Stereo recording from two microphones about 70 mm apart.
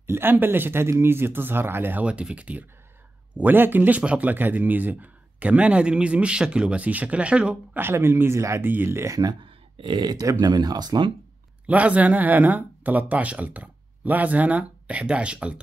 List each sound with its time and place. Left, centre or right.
0.0 s speech: right
2.0 s speech: centre
7.7 s speech: right
8.6 s speech: right
9.1 s speech: right
9.9 s speech: right
11.6 s speech: right